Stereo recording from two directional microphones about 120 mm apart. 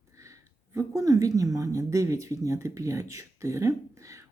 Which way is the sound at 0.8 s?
25° right (ahead or behind).